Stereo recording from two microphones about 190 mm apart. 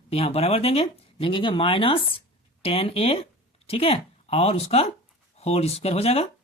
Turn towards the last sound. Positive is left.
turn(degrees=30)  # may be behind; listen again after turning